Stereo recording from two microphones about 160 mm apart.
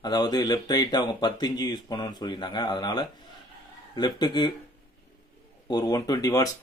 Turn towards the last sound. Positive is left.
turn(degrees=25)  # may be behind; listen again after turning